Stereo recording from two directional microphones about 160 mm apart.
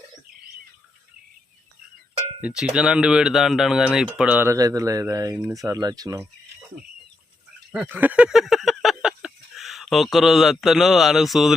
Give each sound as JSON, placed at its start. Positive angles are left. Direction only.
{"t": 2.4, "sound": "cowbell", "side_deg": -5}
{"t": 2.7, "sound": "speech", "side_deg": -5}
{"t": 7.7, "sound": "speech", "side_deg": -10}